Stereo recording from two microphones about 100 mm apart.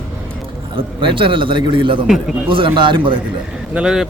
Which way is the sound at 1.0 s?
55° right (ahead or behind).